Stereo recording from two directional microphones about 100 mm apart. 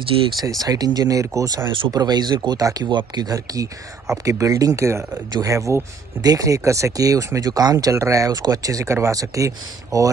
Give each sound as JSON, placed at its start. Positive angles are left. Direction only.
{"t": 0.3, "sound": "speech", "side_deg": 0}
{"t": 0.6, "sound": "speech", "side_deg": -40}